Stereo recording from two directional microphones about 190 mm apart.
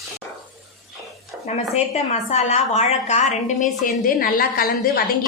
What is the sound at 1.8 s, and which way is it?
A woman's voice, 35° left (ahead or behind).